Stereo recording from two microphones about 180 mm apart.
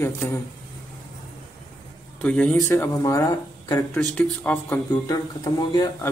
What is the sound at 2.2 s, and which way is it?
Speech, 5° left (ahead or behind).